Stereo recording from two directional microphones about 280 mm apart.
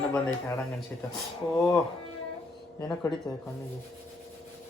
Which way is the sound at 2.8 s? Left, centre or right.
Centre.